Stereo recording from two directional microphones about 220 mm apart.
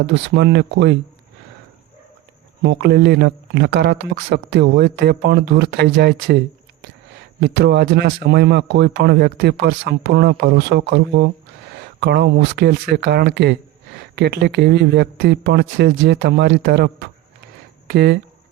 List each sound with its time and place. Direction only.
0.0 s speech: 50° right (ahead or behind)
2.6 s speech: 50° right (ahead or behind)